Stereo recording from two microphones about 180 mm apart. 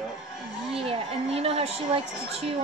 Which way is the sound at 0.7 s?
30° right (ahead or behind).